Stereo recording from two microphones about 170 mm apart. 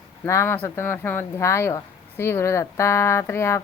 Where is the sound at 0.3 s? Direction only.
15° left (ahead or behind).